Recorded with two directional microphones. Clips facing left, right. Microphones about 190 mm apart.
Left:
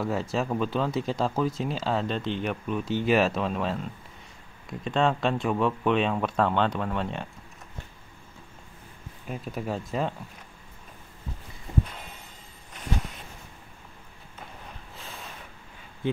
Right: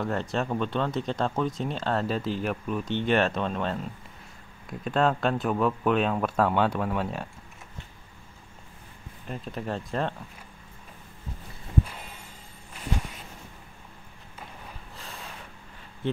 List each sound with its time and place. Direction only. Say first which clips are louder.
0.0 s speech: left 1 dB; 5° left (ahead or behind)
9.3 s speech: left 1 dB; 5° left (ahead or behind)